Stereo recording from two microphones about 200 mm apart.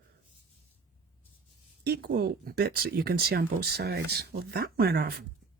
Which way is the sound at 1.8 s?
50° right (ahead or behind).